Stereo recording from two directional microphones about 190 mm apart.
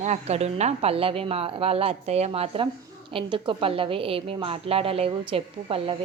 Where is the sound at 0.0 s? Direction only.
35° right (ahead or behind).